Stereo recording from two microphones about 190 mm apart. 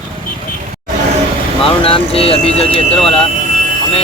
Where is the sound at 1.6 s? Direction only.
30° left (ahead or behind).